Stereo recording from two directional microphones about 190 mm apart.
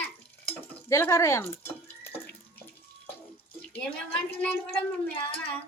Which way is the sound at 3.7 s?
5° left (ahead or behind).